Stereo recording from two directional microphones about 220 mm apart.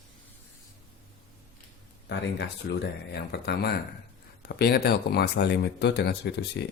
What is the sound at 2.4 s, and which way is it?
Speech, 50° left (ahead or behind).